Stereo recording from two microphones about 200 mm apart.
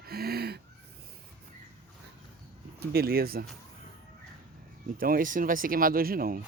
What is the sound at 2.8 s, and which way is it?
Speech, 50° right (ahead or behind).